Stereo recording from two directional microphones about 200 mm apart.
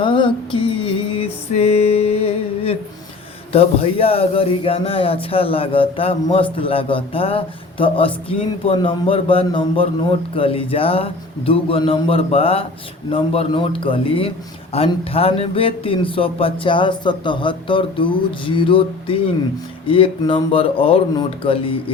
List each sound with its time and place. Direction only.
0.0 s music: 25° left (ahead or behind)
3.5 s speech: 30° left (ahead or behind)